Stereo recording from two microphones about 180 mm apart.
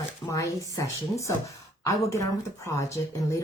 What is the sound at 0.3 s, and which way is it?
A woman's voice, 15° left (ahead or behind).